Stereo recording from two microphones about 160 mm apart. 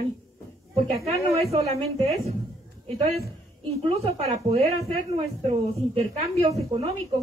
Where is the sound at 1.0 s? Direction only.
40° right (ahead or behind).